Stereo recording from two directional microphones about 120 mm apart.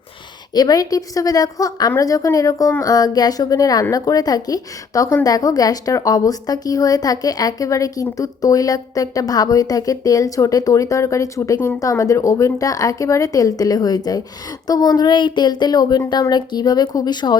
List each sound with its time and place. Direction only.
0.5 s a woman's voice: 35° left (ahead or behind)